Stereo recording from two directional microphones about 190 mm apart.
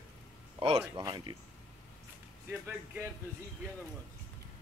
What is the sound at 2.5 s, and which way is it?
Speech, 10° right (ahead or behind).